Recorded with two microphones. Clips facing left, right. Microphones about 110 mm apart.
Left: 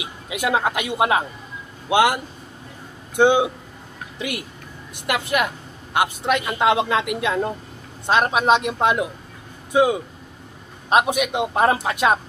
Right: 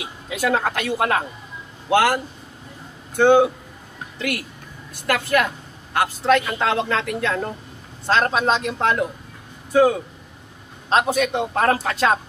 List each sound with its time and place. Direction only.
0.0 s a man's voice: 10° left (ahead or behind)
4.2 s a man's voice: 15° left (ahead or behind)